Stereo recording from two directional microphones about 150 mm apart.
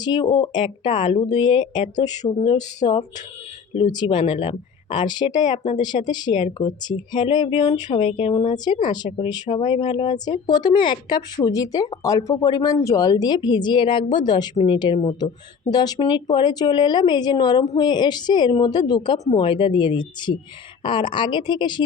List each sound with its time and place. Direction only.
0.0 s speech: 30° left (ahead or behind)
5.5 s speech: 50° left (ahead or behind)
6.1 s a woman's voice: 30° left (ahead or behind)
8.5 s a woman's voice: 30° left (ahead or behind)
14.5 s speech: 45° left (ahead or behind)
15.7 s a woman's voice: 25° left (ahead or behind)